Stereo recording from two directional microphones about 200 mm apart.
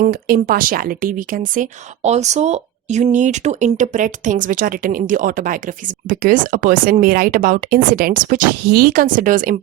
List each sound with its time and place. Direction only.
0.0 s speech: 45° right (ahead or behind)